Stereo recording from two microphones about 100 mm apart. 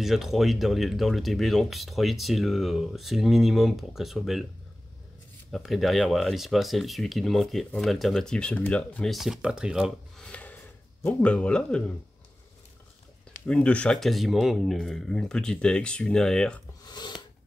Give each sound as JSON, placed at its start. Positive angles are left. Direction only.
{"t": 0.0, "sound": "speech", "side_deg": -5}
{"t": 5.5, "sound": "speech", "side_deg": 0}
{"t": 9.1, "sound": "speech", "side_deg": -5}
{"t": 10.1, "sound": "a sound", "side_deg": 10}
{"t": 11.1, "sound": "speech", "side_deg": 15}
{"t": 13.5, "sound": "speech", "side_deg": 10}
{"t": 16.8, "sound": "a sound", "side_deg": 45}